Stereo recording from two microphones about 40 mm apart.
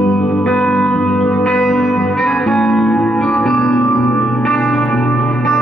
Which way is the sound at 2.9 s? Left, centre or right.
Left.